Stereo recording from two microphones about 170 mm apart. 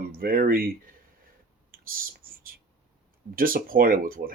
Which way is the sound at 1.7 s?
55° right (ahead or behind).